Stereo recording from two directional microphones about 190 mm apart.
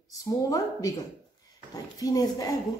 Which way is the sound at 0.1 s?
15° left (ahead or behind).